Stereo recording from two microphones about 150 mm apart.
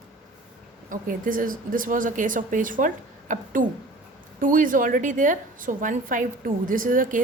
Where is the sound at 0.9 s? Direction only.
65° right (ahead or behind).